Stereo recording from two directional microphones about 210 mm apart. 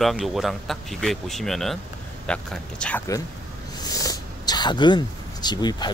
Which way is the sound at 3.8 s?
15° left (ahead or behind).